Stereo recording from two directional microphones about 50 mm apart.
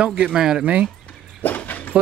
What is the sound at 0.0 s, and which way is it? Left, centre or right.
Speech, centre.